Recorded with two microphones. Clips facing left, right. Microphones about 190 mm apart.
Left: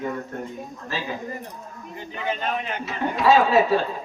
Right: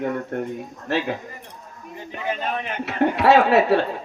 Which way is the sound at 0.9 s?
65° right (ahead or behind).